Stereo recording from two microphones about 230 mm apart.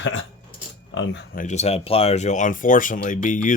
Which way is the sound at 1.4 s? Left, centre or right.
Left.